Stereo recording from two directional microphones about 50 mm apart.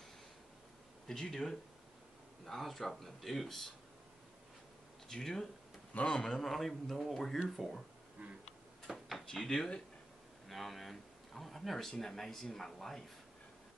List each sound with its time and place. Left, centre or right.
1.0 s a man's voice: centre
5.1 s speech: centre
6.5 s a man's voice: centre
8.9 s drawer open or close: centre
9.5 s speech: centre
10.5 s speech: centre